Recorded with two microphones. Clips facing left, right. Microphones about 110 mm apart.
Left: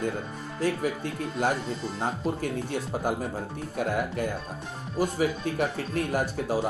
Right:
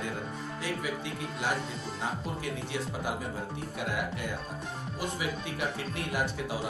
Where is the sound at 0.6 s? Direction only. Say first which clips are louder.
Left 9 dB; 45° left (ahead or behind).